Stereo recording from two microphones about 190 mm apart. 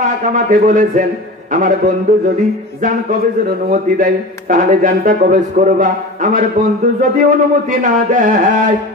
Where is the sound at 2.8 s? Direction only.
45° right (ahead or behind).